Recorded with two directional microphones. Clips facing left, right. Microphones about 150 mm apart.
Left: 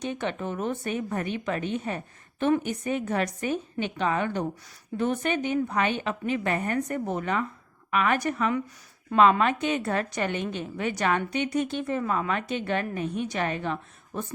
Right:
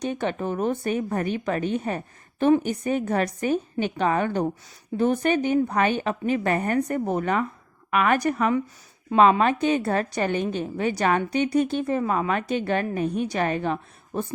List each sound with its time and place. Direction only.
0.0 s a woman's voice: 40° right (ahead or behind)